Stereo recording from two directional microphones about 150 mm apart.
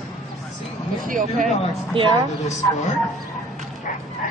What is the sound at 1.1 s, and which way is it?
Speech, 65° right (ahead or behind).